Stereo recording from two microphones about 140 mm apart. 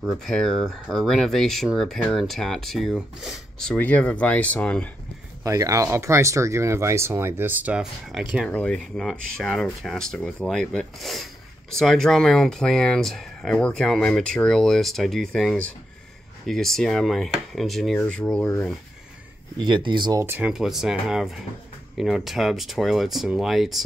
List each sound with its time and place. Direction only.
0.1 s speech: 5° left (ahead or behind)
5.4 s speech: 25° right (ahead or behind); by 8.5 s 5° right (ahead or behind)
8.5 s speech: 10° left (ahead or behind)
17.9 s speech: 10° left (ahead or behind)
19.6 s speech: 35° right (ahead or behind)
20.2 s speech: 10° right (ahead or behind)